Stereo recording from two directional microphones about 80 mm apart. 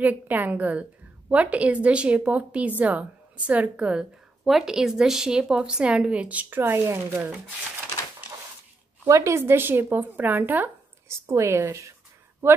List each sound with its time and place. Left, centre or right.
0.0 s a woman's voice: right
9.0 s a woman's voice: right
11.1 s a woman's voice: right